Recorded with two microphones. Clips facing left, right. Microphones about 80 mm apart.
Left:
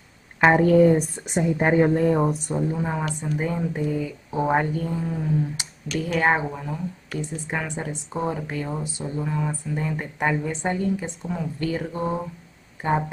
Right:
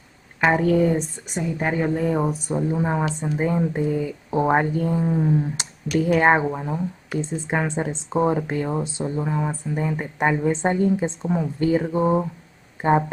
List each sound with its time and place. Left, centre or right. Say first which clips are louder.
0.4 s speech: left 3 dB; centre
1.3 s a woman's voice: left 4 dB; left
1.9 s speech: left 2 dB; centre
2.7 s a woman's voice: right 4 dB; centre
5.0 s a woman's voice: right 4 dB; right
10.4 s a woman's voice: right 5 dB; right
11.9 s a woman's voice: right 7 dB; centre